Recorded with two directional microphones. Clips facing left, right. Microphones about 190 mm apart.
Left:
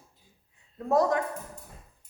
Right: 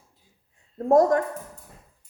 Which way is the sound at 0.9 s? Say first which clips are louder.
Right 6 dB; 45° right (ahead or behind).